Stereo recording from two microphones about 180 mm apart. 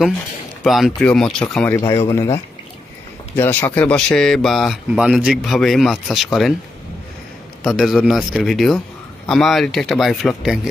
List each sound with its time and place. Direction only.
0.7 s a man's voice: centre (ahead or behind)
7.6 s a man's voice: centre (ahead or behind)